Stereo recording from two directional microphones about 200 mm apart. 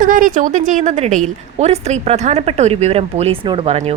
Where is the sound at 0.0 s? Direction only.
40° right (ahead or behind).